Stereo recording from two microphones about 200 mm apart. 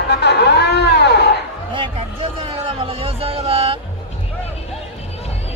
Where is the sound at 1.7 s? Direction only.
25° right (ahead or behind).